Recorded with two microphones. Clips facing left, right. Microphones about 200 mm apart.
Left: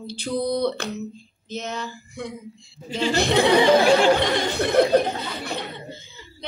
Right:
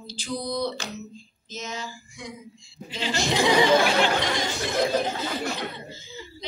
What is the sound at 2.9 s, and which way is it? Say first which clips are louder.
Speech: left 5 dB; 45° left (ahead or behind).